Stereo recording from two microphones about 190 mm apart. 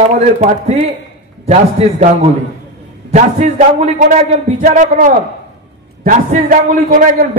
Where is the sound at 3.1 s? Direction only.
35° right (ahead or behind).